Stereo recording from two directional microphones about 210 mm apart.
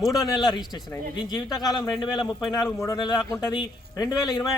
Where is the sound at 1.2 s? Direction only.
20° left (ahead or behind).